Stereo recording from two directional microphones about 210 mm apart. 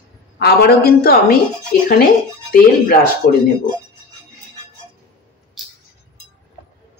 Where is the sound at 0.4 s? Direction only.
50° left (ahead or behind).